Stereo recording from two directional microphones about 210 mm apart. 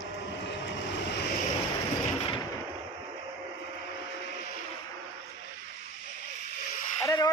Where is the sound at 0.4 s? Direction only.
55° left (ahead or behind).